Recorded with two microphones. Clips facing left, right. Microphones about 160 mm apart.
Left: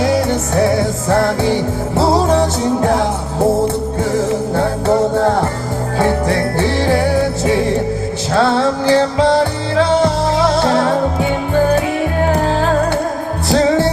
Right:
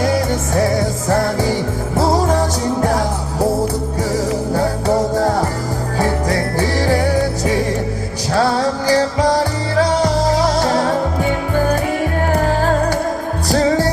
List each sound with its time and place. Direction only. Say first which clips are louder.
6.2 s music: left 2 dB; 25° left (ahead or behind)
8.4 s music: left 3 dB; 25° left (ahead or behind)